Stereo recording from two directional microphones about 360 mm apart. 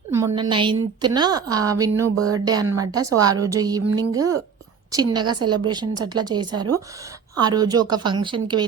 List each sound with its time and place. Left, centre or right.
0.1 s a woman's voice: centre
2.1 s a woman's voice: right
2.4 s a woman's voice: centre
5.2 s a woman's voice: right
5.6 s a woman's voice: centre
6.5 s a woman's voice: right
7.3 s a woman's voice: centre